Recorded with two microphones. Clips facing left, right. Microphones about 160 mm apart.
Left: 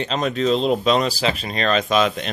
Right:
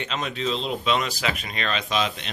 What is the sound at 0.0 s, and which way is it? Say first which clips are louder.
Speech: left 7 dB; 40° left (ahead or behind).